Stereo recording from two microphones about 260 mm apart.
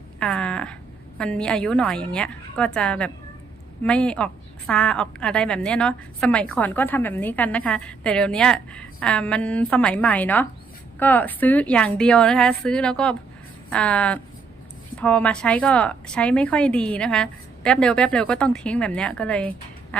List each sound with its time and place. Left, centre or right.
0.2 s a woman's voice: centre